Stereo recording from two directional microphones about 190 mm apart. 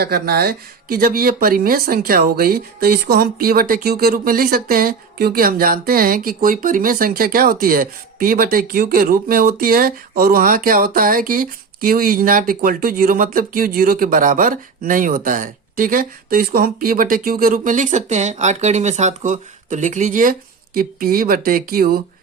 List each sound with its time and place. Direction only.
0.0 s speech: 55° right (ahead or behind)